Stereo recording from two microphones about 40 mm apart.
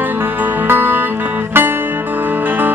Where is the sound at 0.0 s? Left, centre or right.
Right.